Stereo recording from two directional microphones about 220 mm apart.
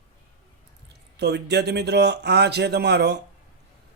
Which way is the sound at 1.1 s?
50° right (ahead or behind).